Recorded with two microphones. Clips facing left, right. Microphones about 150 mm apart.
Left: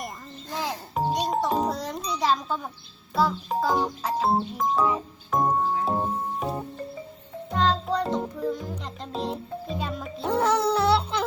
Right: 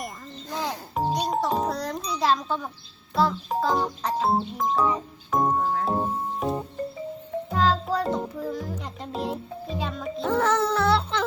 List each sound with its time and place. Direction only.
0.5 s music: centre (ahead or behind)
3.2 s a child's voice: 5° left (ahead or behind)
4.5 s music: centre (ahead or behind)
8.8 s a child's voice: 5° right (ahead or behind)
10.2 s speech: 10° left (ahead or behind)
10.7 s baby cry: 30° left (ahead or behind)
10.9 s music: 10° left (ahead or behind)